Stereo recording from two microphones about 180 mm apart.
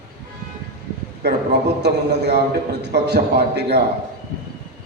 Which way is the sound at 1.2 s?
65° right (ahead or behind).